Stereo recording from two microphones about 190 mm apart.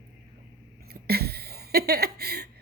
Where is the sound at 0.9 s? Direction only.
55° right (ahead or behind).